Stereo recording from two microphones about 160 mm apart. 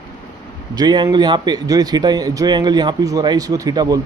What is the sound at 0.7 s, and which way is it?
A man's voice, 25° right (ahead or behind).